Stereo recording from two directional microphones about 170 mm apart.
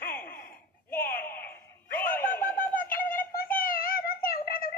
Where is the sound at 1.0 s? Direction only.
60° left (ahead or behind).